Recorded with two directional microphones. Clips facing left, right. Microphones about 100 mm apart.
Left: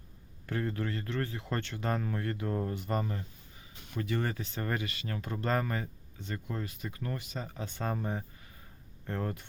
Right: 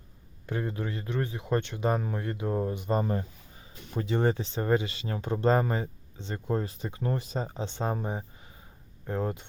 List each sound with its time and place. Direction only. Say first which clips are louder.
0.4 s speech: right 1 dB; 20° right (ahead or behind)